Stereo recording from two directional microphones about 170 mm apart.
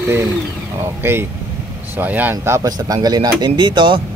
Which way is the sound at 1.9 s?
10° right (ahead or behind).